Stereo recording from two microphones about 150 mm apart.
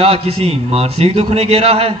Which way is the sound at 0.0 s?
40° right (ahead or behind).